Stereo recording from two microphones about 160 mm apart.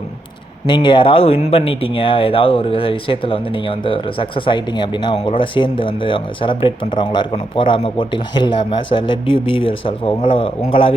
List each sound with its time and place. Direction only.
0.7 s speech: 30° left (ahead or behind)